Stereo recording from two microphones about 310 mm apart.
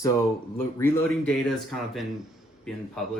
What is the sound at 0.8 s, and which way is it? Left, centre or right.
Speech, centre.